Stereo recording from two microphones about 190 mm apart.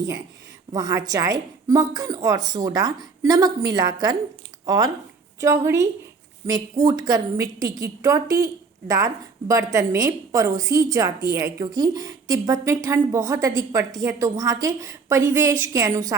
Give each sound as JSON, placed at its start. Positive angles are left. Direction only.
{"t": 0.7, "sound": "a woman's voice", "side_deg": -20}